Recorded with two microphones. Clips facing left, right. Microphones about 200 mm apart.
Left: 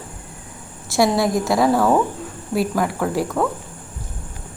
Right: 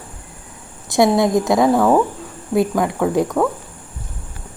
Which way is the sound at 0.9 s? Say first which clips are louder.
Right 3 dB; 20° right (ahead or behind).